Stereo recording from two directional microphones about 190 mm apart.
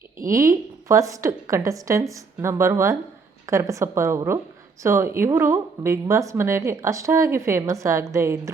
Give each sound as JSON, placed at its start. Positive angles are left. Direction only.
{"t": 0.3, "sound": "speech", "side_deg": -15}